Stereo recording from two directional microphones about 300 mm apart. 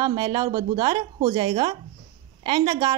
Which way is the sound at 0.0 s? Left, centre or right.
Centre.